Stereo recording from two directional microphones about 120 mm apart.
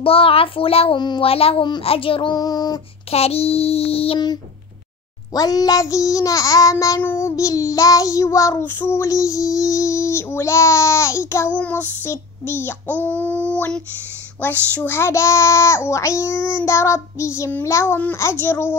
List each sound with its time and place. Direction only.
0.0 s a child's voice: 50° left (ahead or behind)
2.3 s music: 35° left (ahead or behind)
3.1 s a child's voice: 55° left (ahead or behind)
5.3 s child singing: 30° left (ahead or behind)